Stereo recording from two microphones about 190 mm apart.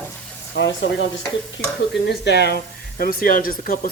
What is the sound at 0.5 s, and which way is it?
Speech, 70° left (ahead or behind).